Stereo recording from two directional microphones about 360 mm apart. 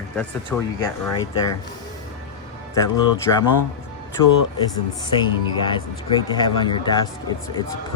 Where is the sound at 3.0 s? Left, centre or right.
Left.